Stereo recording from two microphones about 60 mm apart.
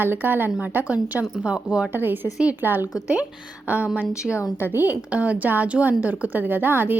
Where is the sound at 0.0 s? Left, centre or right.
Right; by 1.9 s centre.